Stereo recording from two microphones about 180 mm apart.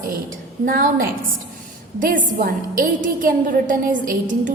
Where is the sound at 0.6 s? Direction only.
50° right (ahead or behind).